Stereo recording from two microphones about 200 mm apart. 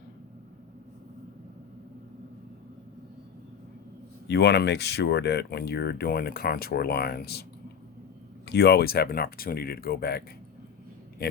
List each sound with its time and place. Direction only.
4.3 s speech: 55° left (ahead or behind)
8.4 s speech: 55° left (ahead or behind)